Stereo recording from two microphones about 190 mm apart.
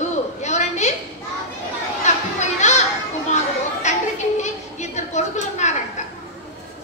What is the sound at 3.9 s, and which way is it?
Children playing, 40° left (ahead or behind).